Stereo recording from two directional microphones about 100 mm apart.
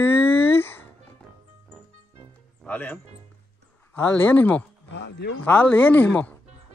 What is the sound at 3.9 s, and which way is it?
Speech, 20° left (ahead or behind).